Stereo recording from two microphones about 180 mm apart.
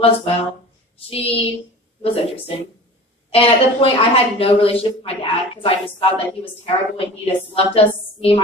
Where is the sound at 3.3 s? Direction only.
30° left (ahead or behind).